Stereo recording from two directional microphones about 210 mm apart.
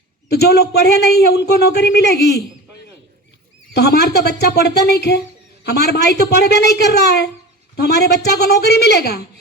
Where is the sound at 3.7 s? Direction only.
50° left (ahead or behind).